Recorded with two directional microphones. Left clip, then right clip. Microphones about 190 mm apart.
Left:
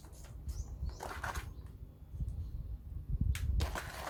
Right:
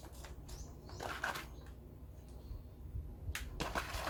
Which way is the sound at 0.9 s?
5° right (ahead or behind).